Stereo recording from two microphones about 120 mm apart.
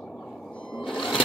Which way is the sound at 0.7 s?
5° left (ahead or behind).